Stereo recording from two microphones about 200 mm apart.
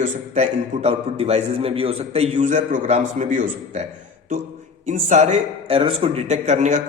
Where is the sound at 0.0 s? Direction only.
35° right (ahead or behind).